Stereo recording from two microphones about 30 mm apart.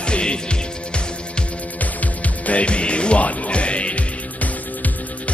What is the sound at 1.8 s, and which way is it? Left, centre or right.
Music, left.